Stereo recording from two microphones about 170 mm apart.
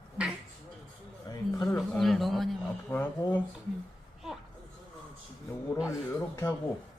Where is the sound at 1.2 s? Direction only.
20° left (ahead or behind).